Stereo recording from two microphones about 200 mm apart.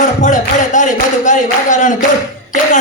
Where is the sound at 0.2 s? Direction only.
40° left (ahead or behind).